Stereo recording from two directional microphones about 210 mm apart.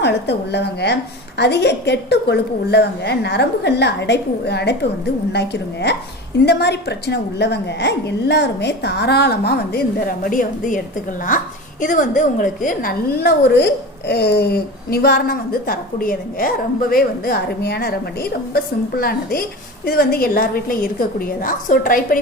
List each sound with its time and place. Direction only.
0.0 s a woman's voice: 55° left (ahead or behind)
11.8 s a woman's voice: 40° left (ahead or behind)